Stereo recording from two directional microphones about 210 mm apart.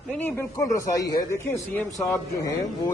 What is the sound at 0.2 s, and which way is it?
A man's voice, 15° left (ahead or behind).